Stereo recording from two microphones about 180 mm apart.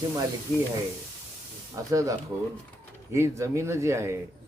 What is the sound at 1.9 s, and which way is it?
Speech, 20° right (ahead or behind).